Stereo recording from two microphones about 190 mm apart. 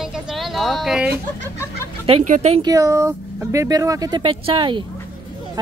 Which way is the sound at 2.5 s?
20° right (ahead or behind).